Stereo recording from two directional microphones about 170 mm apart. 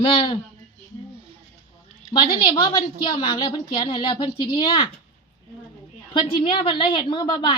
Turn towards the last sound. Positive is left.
turn(degrees=30)  # may be behind; listen again after turning